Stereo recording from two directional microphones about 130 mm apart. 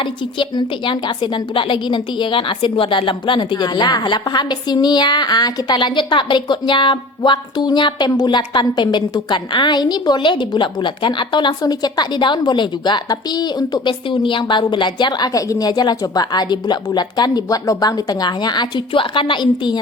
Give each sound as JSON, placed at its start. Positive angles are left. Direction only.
{"t": 0.0, "sound": "a woman's voice", "side_deg": 40}